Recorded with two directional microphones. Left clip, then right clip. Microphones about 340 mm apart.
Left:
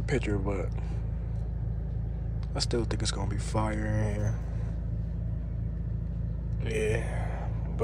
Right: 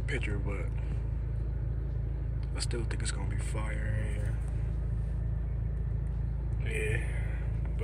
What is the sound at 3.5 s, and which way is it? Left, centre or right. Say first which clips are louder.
Speech: left 10 dB; left.